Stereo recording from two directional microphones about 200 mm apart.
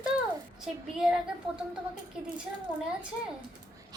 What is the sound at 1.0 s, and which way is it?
Speech, centre (ahead or behind).